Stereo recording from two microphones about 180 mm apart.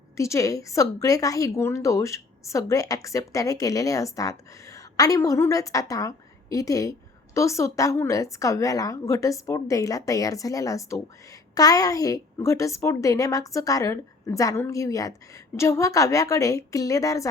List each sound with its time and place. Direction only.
0.2 s a woman's voice: 15° left (ahead or behind)